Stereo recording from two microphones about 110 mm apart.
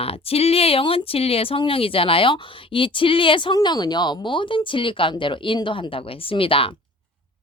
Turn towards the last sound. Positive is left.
turn(degrees=55)  # may be behind; listen again after turning